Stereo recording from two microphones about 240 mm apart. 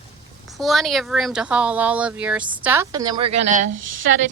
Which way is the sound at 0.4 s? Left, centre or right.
Centre.